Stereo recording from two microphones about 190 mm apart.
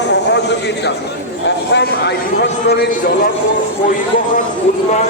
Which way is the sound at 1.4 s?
65° left (ahead or behind).